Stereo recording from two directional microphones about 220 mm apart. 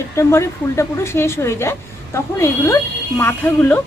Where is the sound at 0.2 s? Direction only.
10° left (ahead or behind).